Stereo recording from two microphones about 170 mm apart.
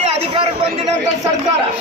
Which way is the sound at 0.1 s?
40° right (ahead or behind).